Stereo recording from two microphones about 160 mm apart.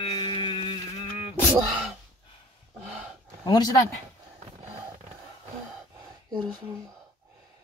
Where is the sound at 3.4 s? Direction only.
25° left (ahead or behind).